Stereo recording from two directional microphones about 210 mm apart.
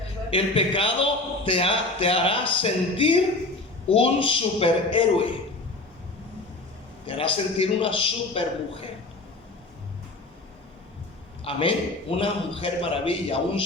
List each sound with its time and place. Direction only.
0.3 s a man's voice: 25° left (ahead or behind)
7.1 s a man's voice: 25° left (ahead or behind)
11.4 s a man's voice: 25° left (ahead or behind)